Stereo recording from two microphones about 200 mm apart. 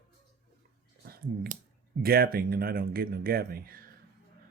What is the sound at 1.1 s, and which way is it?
Speech, 50° right (ahead or behind).